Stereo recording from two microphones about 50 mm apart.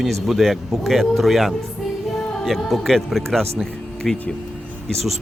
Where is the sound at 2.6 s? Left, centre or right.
Centre.